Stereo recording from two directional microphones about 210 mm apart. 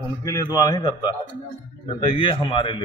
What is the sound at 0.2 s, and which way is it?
A man's voice, 15° left (ahead or behind).